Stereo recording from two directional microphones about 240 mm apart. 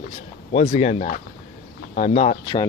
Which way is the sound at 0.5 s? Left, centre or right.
Left.